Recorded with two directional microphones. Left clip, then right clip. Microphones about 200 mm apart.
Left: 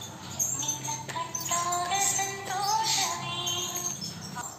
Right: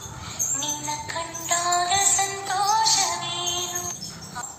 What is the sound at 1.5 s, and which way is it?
Music, 25° right (ahead or behind).